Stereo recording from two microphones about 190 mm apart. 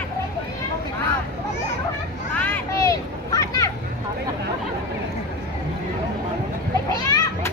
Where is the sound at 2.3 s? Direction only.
10° left (ahead or behind).